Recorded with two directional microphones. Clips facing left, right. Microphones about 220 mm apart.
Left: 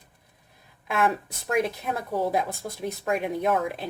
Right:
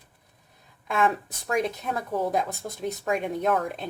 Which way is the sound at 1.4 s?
5° left (ahead or behind).